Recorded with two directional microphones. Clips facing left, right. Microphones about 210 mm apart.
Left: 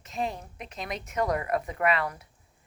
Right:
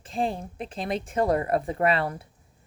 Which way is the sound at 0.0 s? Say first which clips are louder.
Right 4 dB; 30° right (ahead or behind).